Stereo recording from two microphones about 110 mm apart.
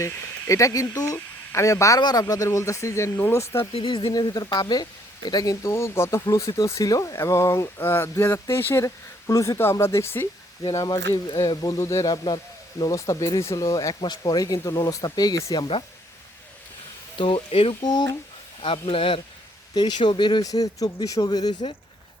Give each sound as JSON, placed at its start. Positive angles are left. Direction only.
{"t": 0.0, "sound": "speech", "side_deg": 30}
{"t": 3.7, "sound": "speech", "side_deg": 50}
{"t": 4.1, "sound": "speech", "side_deg": 35}
{"t": 12.1, "sound": "speech", "side_deg": 40}
{"t": 12.8, "sound": "speech", "side_deg": 30}
{"t": 17.2, "sound": "speech", "side_deg": 55}
{"t": 17.8, "sound": "speech", "side_deg": 35}
{"t": 18.6, "sound": "speech", "side_deg": 55}
{"t": 19.7, "sound": "speech", "side_deg": 45}